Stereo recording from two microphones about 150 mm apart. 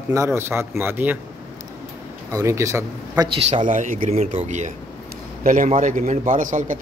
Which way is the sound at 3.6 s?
60° right (ahead or behind).